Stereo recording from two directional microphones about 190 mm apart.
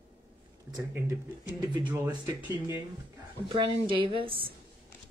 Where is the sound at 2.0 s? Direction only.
20° right (ahead or behind).